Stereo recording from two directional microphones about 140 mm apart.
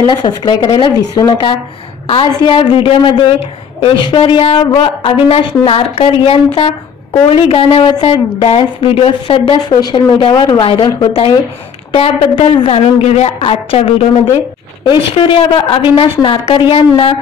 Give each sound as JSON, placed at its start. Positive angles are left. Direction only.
{"t": 0.0, "sound": "a woman's voice", "side_deg": 30}
{"t": 2.0, "sound": "a woman's voice", "side_deg": 40}
{"t": 12.6, "sound": "a woman's voice", "side_deg": 45}